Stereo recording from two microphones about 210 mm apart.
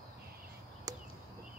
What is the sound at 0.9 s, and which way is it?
Chop, 15° right (ahead or behind).